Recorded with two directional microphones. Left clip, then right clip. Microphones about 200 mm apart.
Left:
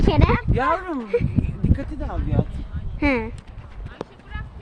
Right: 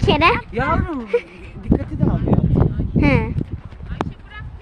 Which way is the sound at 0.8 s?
30° right (ahead or behind).